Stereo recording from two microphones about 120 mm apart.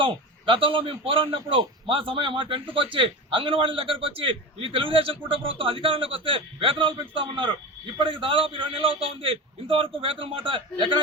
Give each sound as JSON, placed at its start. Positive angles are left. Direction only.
{"t": 0.0, "sound": "a man's voice", "side_deg": -45}